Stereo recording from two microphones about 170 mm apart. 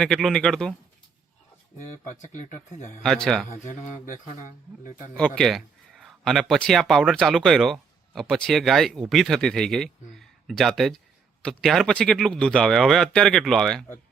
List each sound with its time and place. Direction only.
0.0 s speech: centre (ahead or behind)
2.0 s speech: 45° left (ahead or behind)
3.0 s speech: centre (ahead or behind)
3.5 s speech: 50° left (ahead or behind)
5.1 s speech: 5° left (ahead or behind)